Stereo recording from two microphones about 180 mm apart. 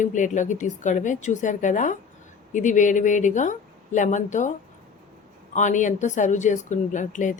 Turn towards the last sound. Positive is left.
turn(degrees=45)  # may be behind; listen again after turning